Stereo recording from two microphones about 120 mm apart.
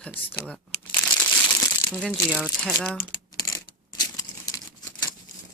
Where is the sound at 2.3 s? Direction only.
5° right (ahead or behind).